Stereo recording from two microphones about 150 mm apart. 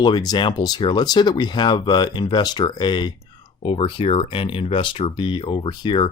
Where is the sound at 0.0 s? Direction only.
30° left (ahead or behind).